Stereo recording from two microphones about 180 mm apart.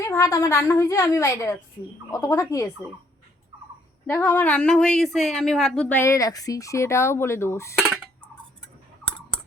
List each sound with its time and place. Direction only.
0.0 s speech: 15° left (ahead or behind)
4.0 s speech: 10° left (ahead or behind)